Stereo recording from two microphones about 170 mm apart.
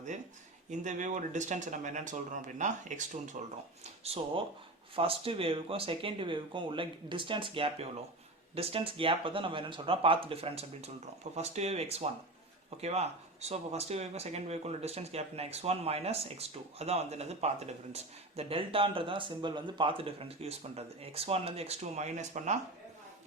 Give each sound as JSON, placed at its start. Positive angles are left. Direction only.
{"t": 0.7, "sound": "speech", "side_deg": -45}